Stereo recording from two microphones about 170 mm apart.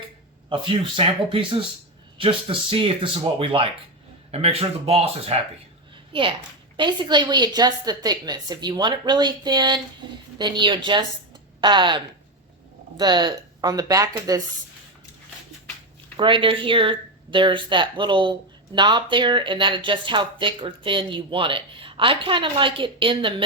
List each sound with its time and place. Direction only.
0.5 s speech: 30° right (ahead or behind)
6.7 s a woman's voice: 25° right (ahead or behind)
16.1 s speech: 30° right (ahead or behind)